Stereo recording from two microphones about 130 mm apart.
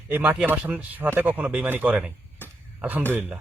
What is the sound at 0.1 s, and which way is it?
Speech, 15° right (ahead or behind).